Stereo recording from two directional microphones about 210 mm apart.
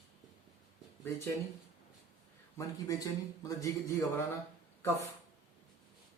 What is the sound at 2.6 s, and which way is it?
A man's voice, 15° left (ahead or behind).